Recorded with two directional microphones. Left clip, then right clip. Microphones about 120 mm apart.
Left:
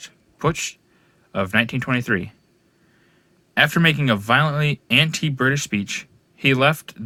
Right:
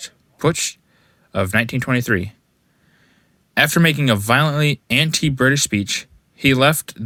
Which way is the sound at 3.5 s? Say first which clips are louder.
Right 1 dB; 40° right (ahead or behind).